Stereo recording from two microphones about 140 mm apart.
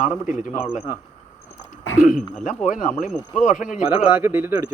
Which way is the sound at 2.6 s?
60° left (ahead or behind).